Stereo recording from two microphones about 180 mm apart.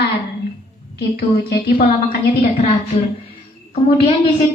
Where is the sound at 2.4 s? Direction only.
35° left (ahead or behind).